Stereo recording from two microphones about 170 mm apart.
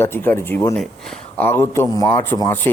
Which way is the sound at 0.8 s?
5° left (ahead or behind).